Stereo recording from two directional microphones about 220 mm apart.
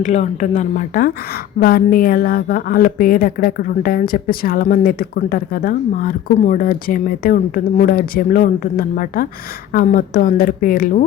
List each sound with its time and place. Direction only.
0.0 s a woman's voice: 30° left (ahead or behind)